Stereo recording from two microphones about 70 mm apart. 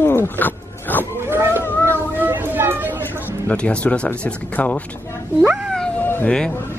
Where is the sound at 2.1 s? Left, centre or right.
Right.